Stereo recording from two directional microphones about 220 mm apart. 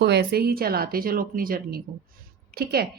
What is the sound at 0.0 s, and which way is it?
A woman's voice, 50° right (ahead or behind).